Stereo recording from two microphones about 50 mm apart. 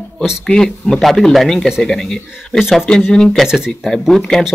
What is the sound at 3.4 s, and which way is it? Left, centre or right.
Speech, centre.